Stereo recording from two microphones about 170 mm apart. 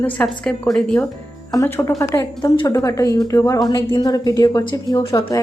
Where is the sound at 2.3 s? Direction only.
30° left (ahead or behind).